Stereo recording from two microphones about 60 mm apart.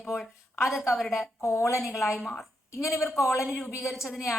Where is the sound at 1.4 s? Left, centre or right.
Left.